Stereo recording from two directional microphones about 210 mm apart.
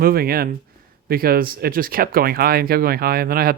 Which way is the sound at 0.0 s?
45° right (ahead or behind).